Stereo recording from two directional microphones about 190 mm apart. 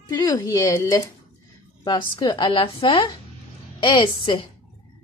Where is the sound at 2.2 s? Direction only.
25° left (ahead or behind).